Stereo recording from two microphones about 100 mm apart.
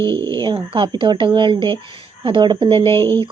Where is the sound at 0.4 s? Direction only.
55° right (ahead or behind).